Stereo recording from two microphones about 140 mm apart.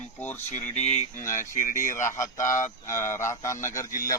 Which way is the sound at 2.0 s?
25° left (ahead or behind).